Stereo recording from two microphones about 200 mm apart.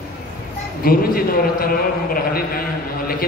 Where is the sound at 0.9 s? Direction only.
45° left (ahead or behind).